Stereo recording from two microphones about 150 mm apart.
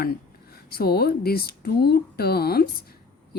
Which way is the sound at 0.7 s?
90° left.